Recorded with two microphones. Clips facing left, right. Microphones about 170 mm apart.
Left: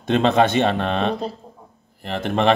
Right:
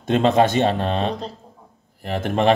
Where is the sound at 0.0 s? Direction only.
45° right (ahead or behind).